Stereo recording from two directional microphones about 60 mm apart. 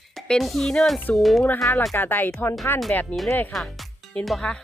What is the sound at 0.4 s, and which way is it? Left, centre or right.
Speech, centre.